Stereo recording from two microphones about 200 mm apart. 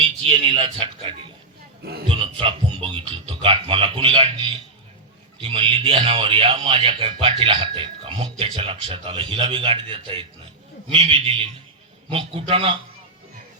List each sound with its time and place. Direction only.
0.0 s a sound: 30° right (ahead or behind)
1.8 s speech: 50° right (ahead or behind)
2.0 s speech: 25° right (ahead or behind)